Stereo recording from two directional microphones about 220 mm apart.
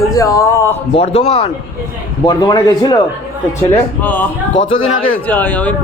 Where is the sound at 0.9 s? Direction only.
30° left (ahead or behind).